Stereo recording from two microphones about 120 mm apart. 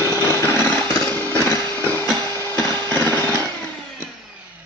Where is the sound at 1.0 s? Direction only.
15° left (ahead or behind).